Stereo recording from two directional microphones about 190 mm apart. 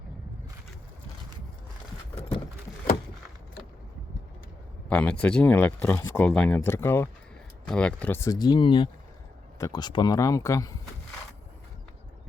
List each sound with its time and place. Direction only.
4.9 s speech: 5° left (ahead or behind)